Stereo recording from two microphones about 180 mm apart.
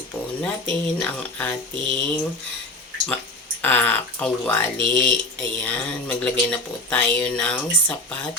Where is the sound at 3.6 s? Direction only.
10° left (ahead or behind).